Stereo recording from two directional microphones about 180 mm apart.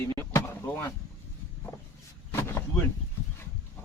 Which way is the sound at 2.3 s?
15° left (ahead or behind).